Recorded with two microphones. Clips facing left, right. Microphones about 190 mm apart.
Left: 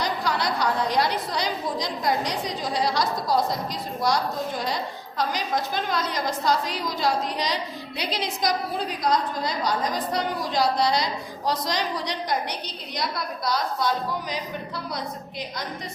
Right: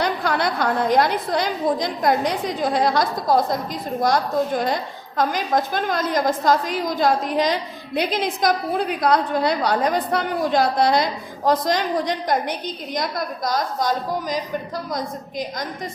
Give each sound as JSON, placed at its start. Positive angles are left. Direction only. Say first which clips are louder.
{"t": 0.0, "sound": "a woman's voice", "louder": "right 4 dB", "side_deg": -55}